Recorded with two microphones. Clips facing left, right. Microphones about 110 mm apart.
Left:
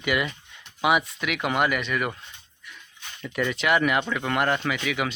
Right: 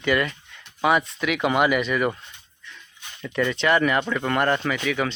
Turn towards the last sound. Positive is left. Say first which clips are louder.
# right 2 dB
turn(degrees=5)  # may be behind; listen again after turning